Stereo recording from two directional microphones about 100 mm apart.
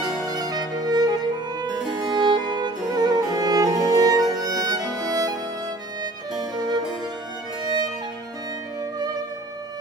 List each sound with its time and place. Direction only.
0.3 s music: 40° right (ahead or behind)
6.5 s music: 45° right (ahead or behind)